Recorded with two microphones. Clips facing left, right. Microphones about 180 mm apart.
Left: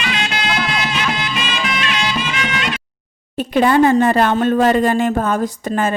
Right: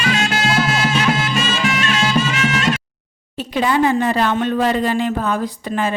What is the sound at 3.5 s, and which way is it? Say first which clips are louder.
A woman's voice: left 4 dB; 50° left (ahead or behind).